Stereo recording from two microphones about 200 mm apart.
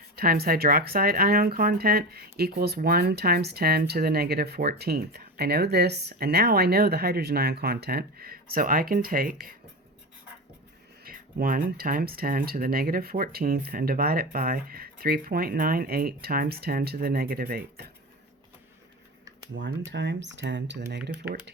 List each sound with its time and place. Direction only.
0.2 s speech: 50° right (ahead or behind)
11.0 s speech: 45° right (ahead or behind)
19.5 s speech: 65° right (ahead or behind)